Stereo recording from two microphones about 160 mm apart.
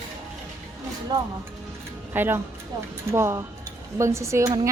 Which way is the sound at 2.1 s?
15° right (ahead or behind).